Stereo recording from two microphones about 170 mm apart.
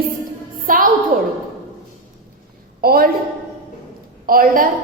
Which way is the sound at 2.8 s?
65° right (ahead or behind).